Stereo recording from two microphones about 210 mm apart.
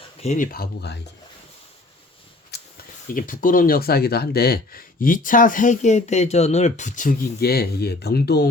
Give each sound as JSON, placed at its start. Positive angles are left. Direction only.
{"t": 0.2, "sound": "speech", "side_deg": 35}
{"t": 2.5, "sound": "a sound", "side_deg": 50}
{"t": 3.1, "sound": "speech", "side_deg": 40}